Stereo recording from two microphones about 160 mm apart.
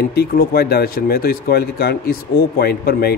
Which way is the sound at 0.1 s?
75° left (ahead or behind).